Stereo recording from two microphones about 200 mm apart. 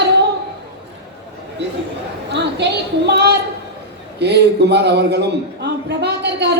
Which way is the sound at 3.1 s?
55° right (ahead or behind).